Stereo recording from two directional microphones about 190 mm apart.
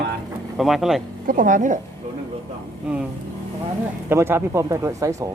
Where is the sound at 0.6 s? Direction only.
Centre (ahead or behind).